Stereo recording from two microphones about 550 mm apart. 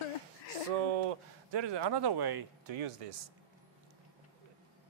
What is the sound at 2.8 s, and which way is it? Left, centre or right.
Speech, right.